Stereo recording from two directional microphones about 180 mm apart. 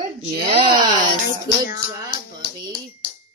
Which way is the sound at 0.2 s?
30° right (ahead or behind).